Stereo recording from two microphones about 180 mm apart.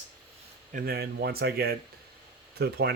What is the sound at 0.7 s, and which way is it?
A man's voice, 55° right (ahead or behind).